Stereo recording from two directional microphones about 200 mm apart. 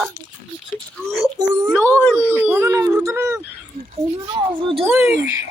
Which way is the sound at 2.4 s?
10° right (ahead or behind).